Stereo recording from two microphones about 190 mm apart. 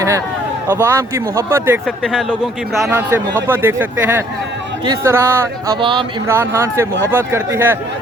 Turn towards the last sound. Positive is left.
turn(degrees=-10)  # may be behind; listen again after turning